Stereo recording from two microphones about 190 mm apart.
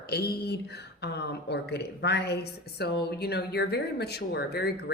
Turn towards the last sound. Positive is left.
turn(degrees=55)  # may be behind; listen again after turning